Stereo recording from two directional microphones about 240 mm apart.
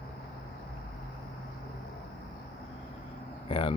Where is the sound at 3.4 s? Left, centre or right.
Left.